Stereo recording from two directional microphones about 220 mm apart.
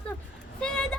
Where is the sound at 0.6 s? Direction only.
5° left (ahead or behind).